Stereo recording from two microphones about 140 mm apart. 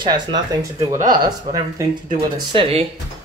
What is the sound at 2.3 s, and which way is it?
Speech, 40° right (ahead or behind).